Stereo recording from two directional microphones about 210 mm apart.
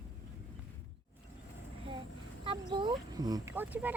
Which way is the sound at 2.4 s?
25° right (ahead or behind).